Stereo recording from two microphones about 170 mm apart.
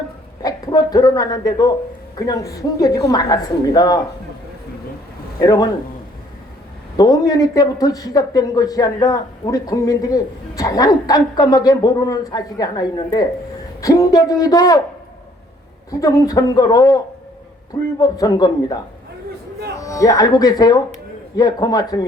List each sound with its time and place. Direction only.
0.4 s a man's voice: 20° left (ahead or behind)
5.4 s a man's voice: 20° left (ahead or behind)
6.9 s a man's voice: 20° left (ahead or behind)
15.9 s a man's voice: 20° left (ahead or behind)
18.0 s a man's voice: 20° left (ahead or behind)
19.8 s a man's voice: 20° left (ahead or behind)